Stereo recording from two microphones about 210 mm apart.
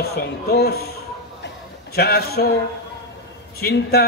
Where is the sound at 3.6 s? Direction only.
50° left (ahead or behind).